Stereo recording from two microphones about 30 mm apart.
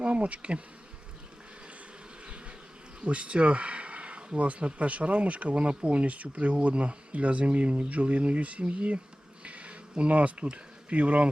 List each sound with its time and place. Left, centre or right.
0.0 s bee: right
3.0 s speech: right
9.4 s a sound: right
10.0 s speech: right